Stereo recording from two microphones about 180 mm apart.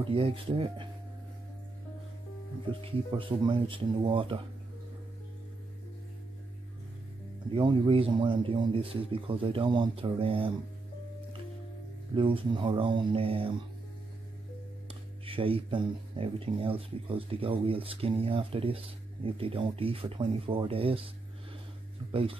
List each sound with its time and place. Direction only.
0.1 s speech: 30° right (ahead or behind)
2.8 s speech: 30° right (ahead or behind)
7.5 s speech: 25° right (ahead or behind)
12.2 s speech: 30° right (ahead or behind)
15.2 s speech: 30° right (ahead or behind)
22.1 s speech: 30° right (ahead or behind)